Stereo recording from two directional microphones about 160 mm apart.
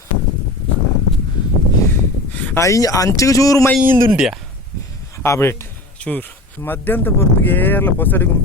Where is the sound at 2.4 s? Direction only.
15° left (ahead or behind).